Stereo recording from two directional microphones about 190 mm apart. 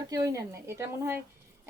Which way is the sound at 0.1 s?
20° right (ahead or behind).